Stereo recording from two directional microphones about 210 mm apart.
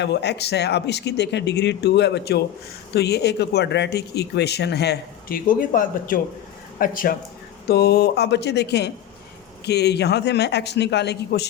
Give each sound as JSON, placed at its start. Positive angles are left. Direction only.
{"t": 0.0, "sound": "speech", "side_deg": 55}